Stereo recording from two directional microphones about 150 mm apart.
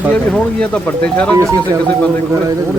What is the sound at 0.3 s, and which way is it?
Speech, 10° left (ahead or behind).